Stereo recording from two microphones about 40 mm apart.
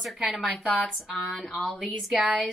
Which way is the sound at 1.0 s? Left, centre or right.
Centre.